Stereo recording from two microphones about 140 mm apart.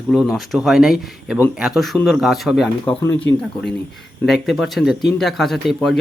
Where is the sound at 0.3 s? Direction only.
Centre (ahead or behind).